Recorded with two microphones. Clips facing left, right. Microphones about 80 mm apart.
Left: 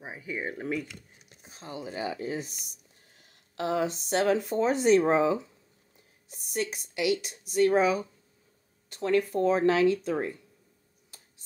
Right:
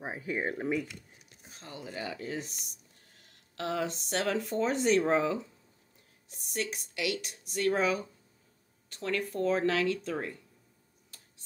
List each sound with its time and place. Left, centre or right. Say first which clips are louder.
0.0 s speech: right 2 dB; right
1.4 s speech: left 5 dB; centre
3.5 s speech: left 5 dB; centre
6.5 s speech: left 4 dB; centre